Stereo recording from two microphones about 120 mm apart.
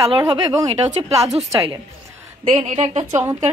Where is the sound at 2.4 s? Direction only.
50° right (ahead or behind).